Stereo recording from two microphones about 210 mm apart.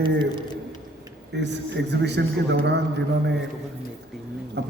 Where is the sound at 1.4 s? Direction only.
55° right (ahead or behind).